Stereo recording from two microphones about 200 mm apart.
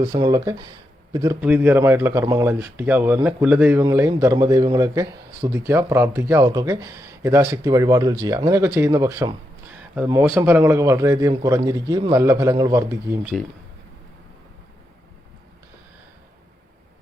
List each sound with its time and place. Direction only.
0.0 s speech: 20° right (ahead or behind)
1.4 s speech: 10° right (ahead or behind)
9.7 s a sound: 5° right (ahead or behind)
10.3 s speech: 10° right (ahead or behind)